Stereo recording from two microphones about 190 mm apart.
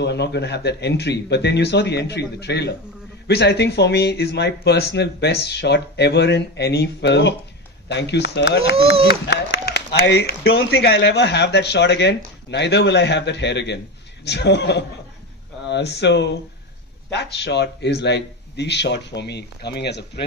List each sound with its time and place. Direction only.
0.0 s speech: 65° left (ahead or behind)